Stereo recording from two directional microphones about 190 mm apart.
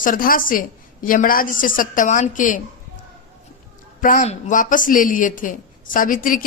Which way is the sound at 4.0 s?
45° left (ahead or behind).